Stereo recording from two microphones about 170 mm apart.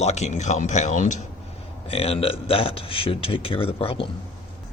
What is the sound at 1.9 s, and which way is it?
Speech, 35° left (ahead or behind).